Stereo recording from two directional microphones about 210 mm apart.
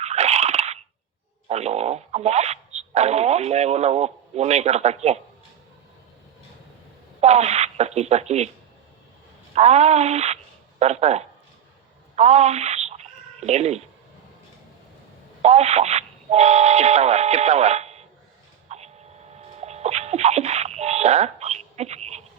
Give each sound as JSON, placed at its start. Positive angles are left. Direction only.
{"t": 0.0, "sound": "a sound", "side_deg": -30}
{"t": 1.5, "sound": "speech", "side_deg": -30}
{"t": 7.2, "sound": "speech", "side_deg": -30}
{"t": 9.6, "sound": "speech", "side_deg": -30}
{"t": 12.1, "sound": "chicken", "side_deg": -30}
{"t": 15.4, "sound": "speech", "side_deg": -30}
{"t": 18.7, "sound": "vehicle", "side_deg": -30}
{"t": 19.4, "sound": "a sound", "side_deg": -30}